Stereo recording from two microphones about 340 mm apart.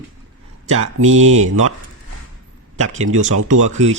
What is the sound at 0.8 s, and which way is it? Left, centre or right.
Speech, right.